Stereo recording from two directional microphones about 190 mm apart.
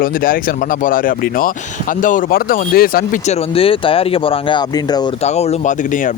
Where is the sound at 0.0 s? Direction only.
50° left (ahead or behind).